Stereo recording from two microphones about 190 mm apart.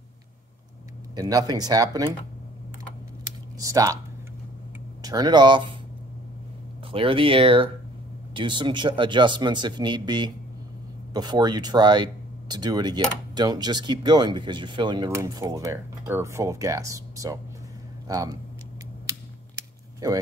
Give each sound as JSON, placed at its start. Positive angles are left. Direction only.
{"t": 1.1, "sound": "speech", "side_deg": -20}
{"t": 3.5, "sound": "speech", "side_deg": -20}
{"t": 5.0, "sound": "speech", "side_deg": -20}
{"t": 6.9, "sound": "speech", "side_deg": -30}
{"t": 20.0, "sound": "speech", "side_deg": -20}